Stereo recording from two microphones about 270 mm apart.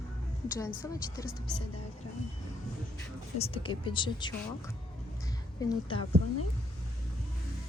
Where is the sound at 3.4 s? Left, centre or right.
Centre.